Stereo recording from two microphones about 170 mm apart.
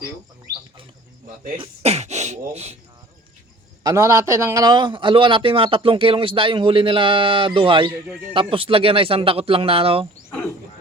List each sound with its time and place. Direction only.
1.5 s speech: 40° right (ahead or behind)
3.8 s a man's voice: 20° right (ahead or behind)